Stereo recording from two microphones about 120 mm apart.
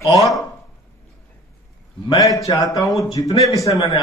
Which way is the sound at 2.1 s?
30° left (ahead or behind).